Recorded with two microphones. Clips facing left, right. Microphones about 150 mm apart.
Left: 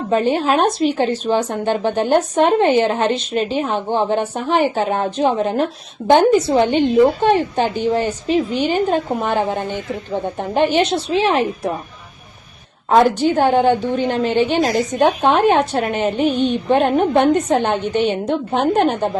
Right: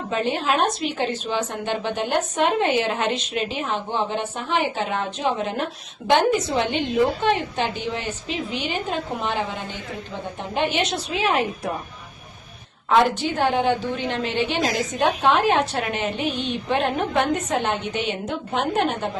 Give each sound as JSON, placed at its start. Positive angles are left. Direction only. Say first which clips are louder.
{"t": 0.1, "sound": "a woman's voice", "louder": "left 7 dB", "side_deg": 40}
{"t": 10.3, "sound": "speech", "louder": "left 7 dB", "side_deg": 35}
{"t": 13.3, "sound": "speech", "louder": "left 6 dB", "side_deg": 45}